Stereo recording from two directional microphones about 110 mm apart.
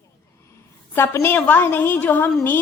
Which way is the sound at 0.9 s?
20° left (ahead or behind).